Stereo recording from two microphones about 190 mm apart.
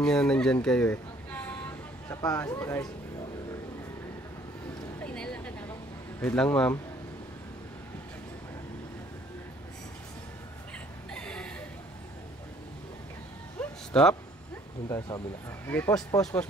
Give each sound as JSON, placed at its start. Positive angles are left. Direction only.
{"t": 0.0, "sound": "speech", "side_deg": 5}
{"t": 5.0, "sound": "a sound", "side_deg": 5}
{"t": 6.2, "sound": "speech", "side_deg": 5}
{"t": 11.1, "sound": "gasp", "side_deg": 5}
{"t": 13.6, "sound": "a sound", "side_deg": 5}
{"t": 14.9, "sound": "speech", "side_deg": 20}